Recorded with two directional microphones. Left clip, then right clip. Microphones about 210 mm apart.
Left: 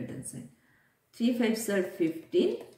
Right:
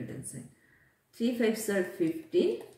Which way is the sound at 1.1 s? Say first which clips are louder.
Even; 20° left (ahead or behind).